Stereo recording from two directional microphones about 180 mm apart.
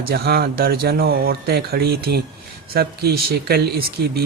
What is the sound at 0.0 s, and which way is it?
A man's voice, 60° right (ahead or behind).